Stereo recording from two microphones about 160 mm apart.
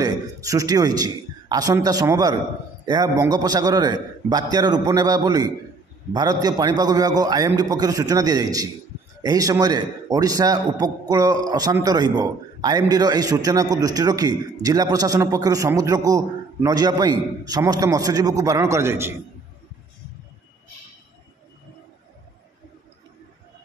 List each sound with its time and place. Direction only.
0.0 s a man's voice: 20° right (ahead or behind)